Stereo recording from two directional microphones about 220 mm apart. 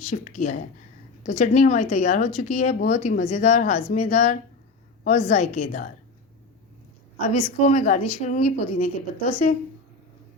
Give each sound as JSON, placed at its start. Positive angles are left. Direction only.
{"t": 0.1, "sound": "speech", "side_deg": 35}
{"t": 7.2, "sound": "speech", "side_deg": 30}